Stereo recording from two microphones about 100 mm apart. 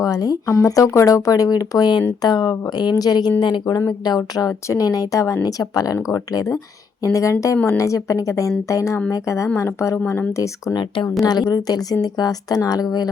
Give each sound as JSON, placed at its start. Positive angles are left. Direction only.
{"t": 0.0, "sound": "speech", "side_deg": 40}
{"t": 3.4, "sound": "speech", "side_deg": 50}
{"t": 3.8, "sound": "speech", "side_deg": 40}
{"t": 10.8, "sound": "speech", "side_deg": 50}